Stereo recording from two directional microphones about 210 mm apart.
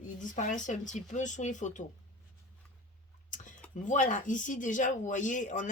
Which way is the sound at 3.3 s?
40° left (ahead or behind).